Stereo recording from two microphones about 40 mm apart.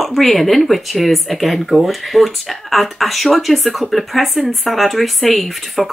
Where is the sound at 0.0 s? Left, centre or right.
Centre.